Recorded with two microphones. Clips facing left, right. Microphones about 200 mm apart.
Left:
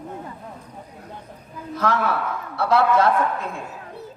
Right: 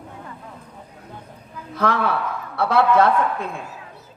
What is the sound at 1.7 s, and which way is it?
A woman's voice, 60° right (ahead or behind).